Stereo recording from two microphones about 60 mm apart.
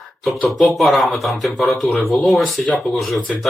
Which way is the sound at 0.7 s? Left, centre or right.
Centre.